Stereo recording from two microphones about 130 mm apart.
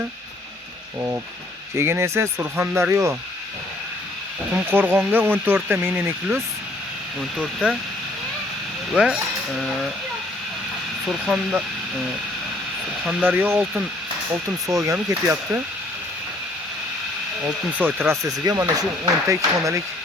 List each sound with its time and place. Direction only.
1.7 s speech: 20° right (ahead or behind)
4.5 s speech: 15° right (ahead or behind)
7.2 s speech: 5° right (ahead or behind)
8.9 s speech: 5° right (ahead or behind)
11.0 s speech: 5° right (ahead or behind)
13.2 s speech: 15° right (ahead or behind)
14.7 s speech: 25° right (ahead or behind)
14.9 s speech: 15° right (ahead or behind)
17.7 s speech: 15° right (ahead or behind)
18.2 s speech: 25° right (ahead or behind)